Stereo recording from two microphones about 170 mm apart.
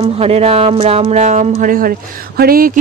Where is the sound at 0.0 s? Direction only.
40° right (ahead or behind).